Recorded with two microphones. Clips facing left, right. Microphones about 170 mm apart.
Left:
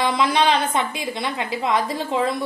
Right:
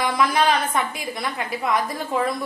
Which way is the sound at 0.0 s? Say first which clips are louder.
Left 1 dB; 25° left (ahead or behind).